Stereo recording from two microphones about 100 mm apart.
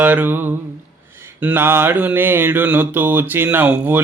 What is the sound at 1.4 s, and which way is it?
Mantra, 20° right (ahead or behind).